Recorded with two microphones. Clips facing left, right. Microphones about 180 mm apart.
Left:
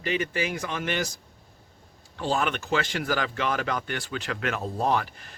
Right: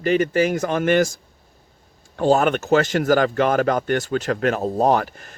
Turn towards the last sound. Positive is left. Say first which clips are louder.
# right 8 dB
turn(degrees=-45)  # may be behind; listen again after turning